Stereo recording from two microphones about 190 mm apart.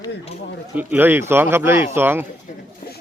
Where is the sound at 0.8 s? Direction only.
10° right (ahead or behind).